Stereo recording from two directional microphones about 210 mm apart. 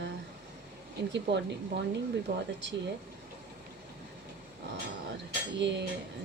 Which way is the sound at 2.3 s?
40° right (ahead or behind).